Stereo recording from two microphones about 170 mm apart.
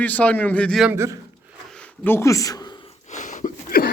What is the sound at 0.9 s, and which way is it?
Speech, 15° right (ahead or behind).